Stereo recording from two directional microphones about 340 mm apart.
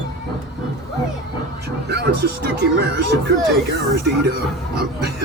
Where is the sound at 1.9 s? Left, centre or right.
Right.